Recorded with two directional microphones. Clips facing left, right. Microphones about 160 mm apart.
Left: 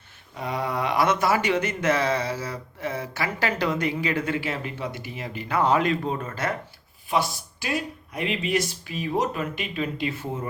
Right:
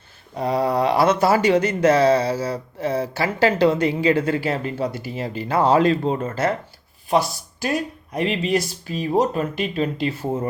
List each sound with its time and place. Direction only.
0.3 s speech: 35° right (ahead or behind)
7.1 s speech: 40° right (ahead or behind)